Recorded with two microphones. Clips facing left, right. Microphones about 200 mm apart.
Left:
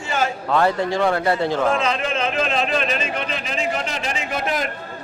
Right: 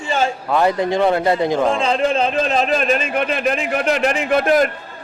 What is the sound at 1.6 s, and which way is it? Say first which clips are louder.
A man's voice: right 4 dB; 30° right (ahead or behind).